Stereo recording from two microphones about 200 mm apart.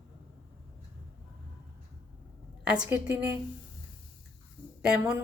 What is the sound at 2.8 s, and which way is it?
Speech, 10° right (ahead or behind).